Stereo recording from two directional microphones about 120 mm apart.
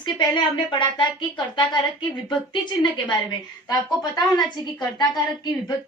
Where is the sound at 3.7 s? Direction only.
35° left (ahead or behind).